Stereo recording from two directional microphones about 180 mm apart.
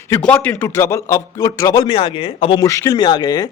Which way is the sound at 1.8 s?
30° left (ahead or behind).